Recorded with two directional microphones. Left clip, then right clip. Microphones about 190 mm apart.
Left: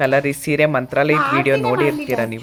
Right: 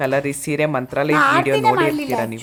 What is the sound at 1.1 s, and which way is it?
Speech, 50° right (ahead or behind).